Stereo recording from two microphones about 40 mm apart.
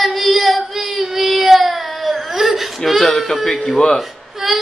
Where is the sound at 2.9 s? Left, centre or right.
Centre.